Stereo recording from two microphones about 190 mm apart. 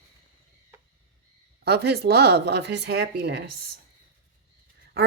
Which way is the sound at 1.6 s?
60° right (ahead or behind).